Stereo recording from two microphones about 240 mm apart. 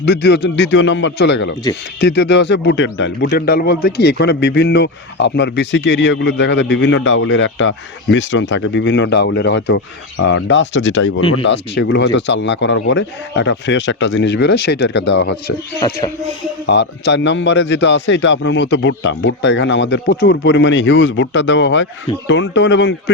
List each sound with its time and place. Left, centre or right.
0.0 s speech: left
11.2 s speech: left
11.4 s speech: left
15.8 s music: centre
16.6 s speech: left